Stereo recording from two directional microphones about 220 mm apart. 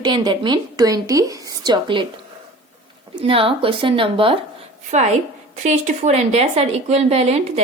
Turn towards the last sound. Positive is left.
turn(degrees=-30)  # may be behind; listen again after turning